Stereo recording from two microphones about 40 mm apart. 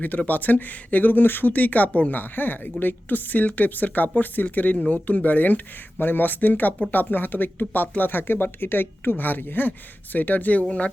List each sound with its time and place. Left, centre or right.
0.3 s speech: left
6.0 s speech: left